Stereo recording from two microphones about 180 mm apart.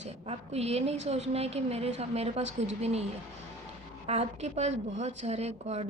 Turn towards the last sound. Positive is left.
turn(degrees=-35)  # may be behind; listen again after turning